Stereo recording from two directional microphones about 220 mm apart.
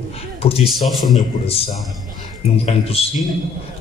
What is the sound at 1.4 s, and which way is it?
Speech, 25° left (ahead or behind).